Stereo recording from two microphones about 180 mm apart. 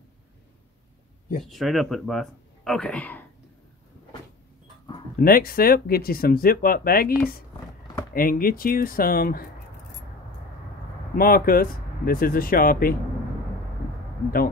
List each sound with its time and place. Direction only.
1.4 s speech: centre (ahead or behind)
5.2 s speech: 55° left (ahead or behind)
11.1 s speech: 55° left (ahead or behind)